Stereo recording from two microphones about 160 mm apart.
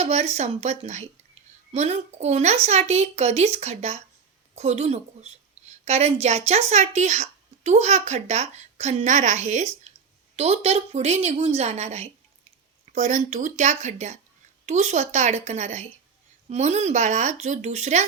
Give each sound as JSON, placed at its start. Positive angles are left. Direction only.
{"t": 0.0, "sound": "a woman's voice", "side_deg": -45}